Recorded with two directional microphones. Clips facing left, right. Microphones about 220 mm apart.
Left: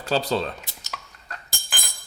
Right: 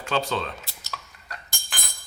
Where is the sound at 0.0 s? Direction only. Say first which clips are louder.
Left 3 dB; 35° left (ahead or behind).